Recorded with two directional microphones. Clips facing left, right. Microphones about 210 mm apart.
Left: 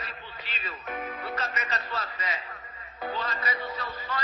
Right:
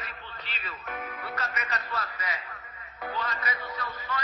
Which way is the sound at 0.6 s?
20° left (ahead or behind).